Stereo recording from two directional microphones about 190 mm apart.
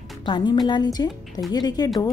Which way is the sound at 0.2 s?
25° left (ahead or behind).